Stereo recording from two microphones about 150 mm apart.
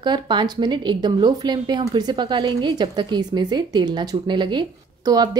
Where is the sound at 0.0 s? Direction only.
30° right (ahead or behind).